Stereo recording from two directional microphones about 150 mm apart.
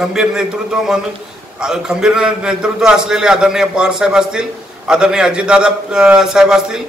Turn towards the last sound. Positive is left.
turn(degrees=-5)  # may be behind; listen again after turning